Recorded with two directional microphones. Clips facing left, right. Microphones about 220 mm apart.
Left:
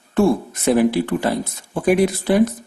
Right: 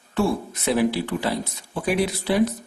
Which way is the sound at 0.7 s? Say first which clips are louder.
Left 5 dB; 50° left (ahead or behind).